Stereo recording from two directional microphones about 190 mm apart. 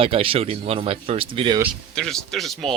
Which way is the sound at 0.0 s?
30° right (ahead or behind).